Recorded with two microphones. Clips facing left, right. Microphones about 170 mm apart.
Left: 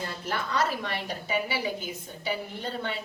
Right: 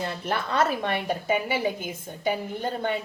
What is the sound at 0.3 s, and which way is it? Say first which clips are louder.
A woman's voice: right 3 dB; 55° right (ahead or behind).